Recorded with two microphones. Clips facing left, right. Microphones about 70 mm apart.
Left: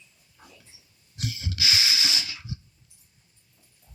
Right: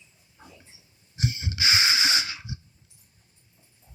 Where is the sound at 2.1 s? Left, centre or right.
Right.